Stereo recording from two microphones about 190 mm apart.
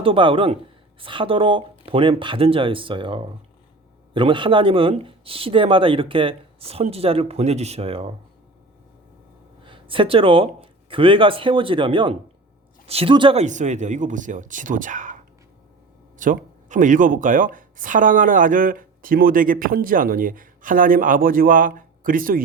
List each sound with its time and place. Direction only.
0.0 s speech: 25° right (ahead or behind)
9.6 s speech: 25° right (ahead or behind); by 22.4 s 45° right (ahead or behind)